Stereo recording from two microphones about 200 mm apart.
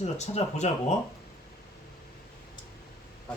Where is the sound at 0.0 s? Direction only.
35° left (ahead or behind).